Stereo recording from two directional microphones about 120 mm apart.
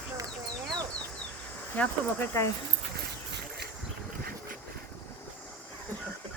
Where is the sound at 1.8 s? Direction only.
20° left (ahead or behind).